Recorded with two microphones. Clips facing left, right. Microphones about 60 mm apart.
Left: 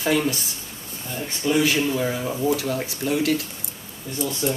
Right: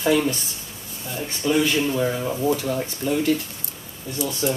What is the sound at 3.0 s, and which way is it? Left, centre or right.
Speech, left.